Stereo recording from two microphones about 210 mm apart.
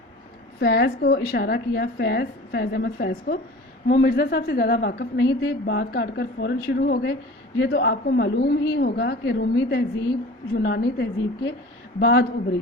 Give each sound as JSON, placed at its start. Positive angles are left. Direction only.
{"t": 0.6, "sound": "a woman's voice", "side_deg": 50}